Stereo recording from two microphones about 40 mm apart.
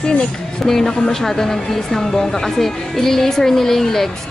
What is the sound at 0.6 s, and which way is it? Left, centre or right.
A woman's voice, centre.